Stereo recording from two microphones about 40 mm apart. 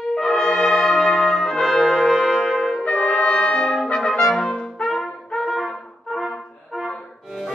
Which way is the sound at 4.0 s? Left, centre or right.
Centre.